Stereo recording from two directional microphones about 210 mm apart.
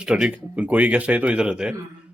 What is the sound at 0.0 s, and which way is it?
Speech, 5° right (ahead or behind).